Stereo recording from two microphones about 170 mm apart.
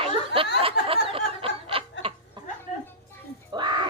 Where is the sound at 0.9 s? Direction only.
35° right (ahead or behind).